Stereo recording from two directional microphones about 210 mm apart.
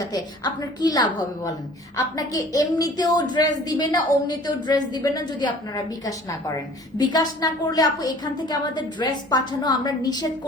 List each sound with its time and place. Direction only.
0.1 s a woman's voice: 20° left (ahead or behind)